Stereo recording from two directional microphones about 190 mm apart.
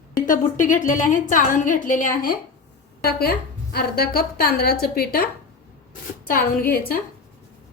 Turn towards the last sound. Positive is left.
turn(degrees=50)  # may be behind; listen again after turning